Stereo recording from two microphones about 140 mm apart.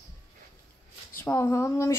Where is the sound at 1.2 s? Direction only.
15° left (ahead or behind).